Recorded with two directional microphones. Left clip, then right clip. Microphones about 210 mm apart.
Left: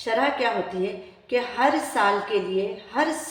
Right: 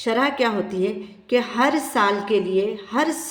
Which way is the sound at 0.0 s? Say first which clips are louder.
Right 2 dB; 35° right (ahead or behind).